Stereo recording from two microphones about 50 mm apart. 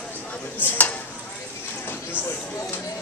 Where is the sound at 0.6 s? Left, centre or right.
Left.